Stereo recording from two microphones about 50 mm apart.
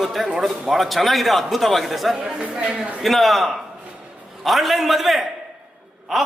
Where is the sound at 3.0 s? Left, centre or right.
Centre.